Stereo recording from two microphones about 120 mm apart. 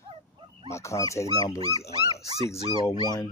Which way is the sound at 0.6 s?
25° left (ahead or behind).